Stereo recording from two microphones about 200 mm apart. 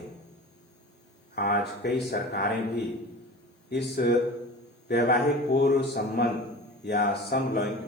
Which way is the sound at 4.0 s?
50° left (ahead or behind).